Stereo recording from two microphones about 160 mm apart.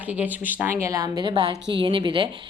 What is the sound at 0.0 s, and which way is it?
Speech, 10° right (ahead or behind).